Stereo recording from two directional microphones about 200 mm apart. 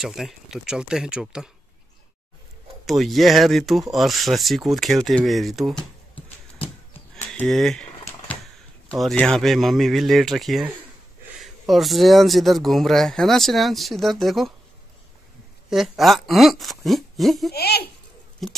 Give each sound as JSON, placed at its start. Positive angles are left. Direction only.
{"t": 0.0, "sound": "speech", "side_deg": 0}
{"t": 2.8, "sound": "speech", "side_deg": 0}
{"t": 7.2, "sound": "speech", "side_deg": 5}
{"t": 15.7, "sound": "speech", "side_deg": 0}
{"t": 17.5, "sound": "speech", "side_deg": 50}
{"t": 18.4, "sound": "speech", "side_deg": 0}